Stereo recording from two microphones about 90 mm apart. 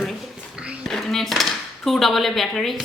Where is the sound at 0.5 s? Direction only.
10° right (ahead or behind).